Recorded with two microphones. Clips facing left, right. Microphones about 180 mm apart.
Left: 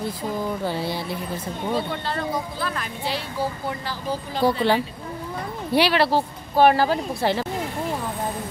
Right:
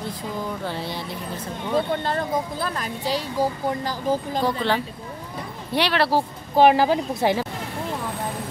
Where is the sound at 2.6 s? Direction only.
40° right (ahead or behind).